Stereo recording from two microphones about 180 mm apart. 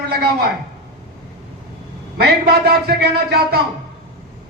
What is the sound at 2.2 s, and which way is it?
A man's voice, 60° right (ahead or behind).